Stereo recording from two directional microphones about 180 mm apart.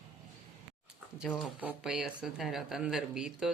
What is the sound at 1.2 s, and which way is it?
Speech, 5° right (ahead or behind).